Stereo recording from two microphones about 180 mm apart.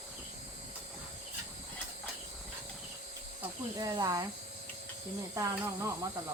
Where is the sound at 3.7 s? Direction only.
20° right (ahead or behind).